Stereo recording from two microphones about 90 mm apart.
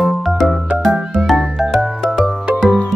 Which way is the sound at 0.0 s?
Centre (ahead or behind).